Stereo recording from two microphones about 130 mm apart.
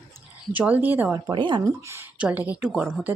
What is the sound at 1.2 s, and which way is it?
Speech, 35° right (ahead or behind).